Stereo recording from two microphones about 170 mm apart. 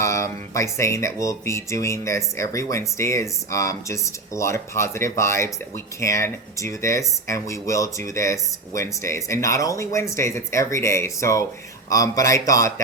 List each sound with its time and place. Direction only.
0.0 s speech: 15° left (ahead or behind)